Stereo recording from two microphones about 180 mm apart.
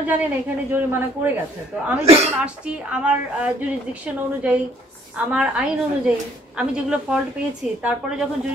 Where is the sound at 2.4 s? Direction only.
5° right (ahead or behind).